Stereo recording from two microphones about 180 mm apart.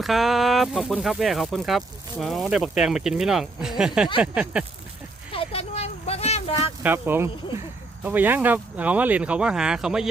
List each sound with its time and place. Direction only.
0.0 s speech: centre (ahead or behind)
5.3 s a sound: 30° left (ahead or behind)
6.8 s speech: 10° right (ahead or behind)